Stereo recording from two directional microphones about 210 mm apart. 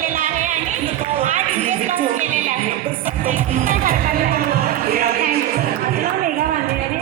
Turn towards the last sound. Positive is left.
turn(degrees=-45)  # may be behind; listen again after turning